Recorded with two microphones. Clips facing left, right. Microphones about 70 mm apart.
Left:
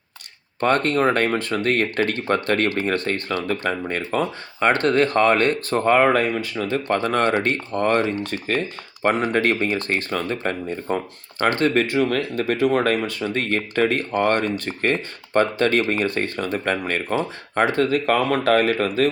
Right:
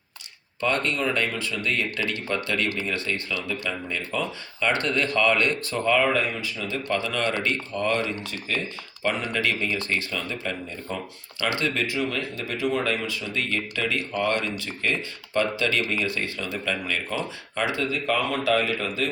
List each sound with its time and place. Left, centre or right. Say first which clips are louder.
0.6 s speech: left 6 dB; left